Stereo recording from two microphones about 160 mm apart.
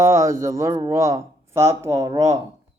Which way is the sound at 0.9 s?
20° right (ahead or behind).